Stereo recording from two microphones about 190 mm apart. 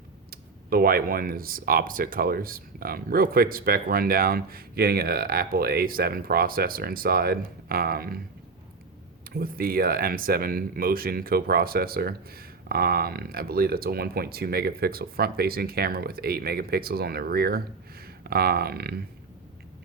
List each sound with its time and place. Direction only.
0.3 s speech: 50° right (ahead or behind)
9.3 s speech: 50° right (ahead or behind)